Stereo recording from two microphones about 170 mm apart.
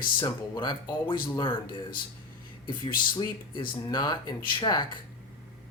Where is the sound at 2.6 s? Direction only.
25° left (ahead or behind).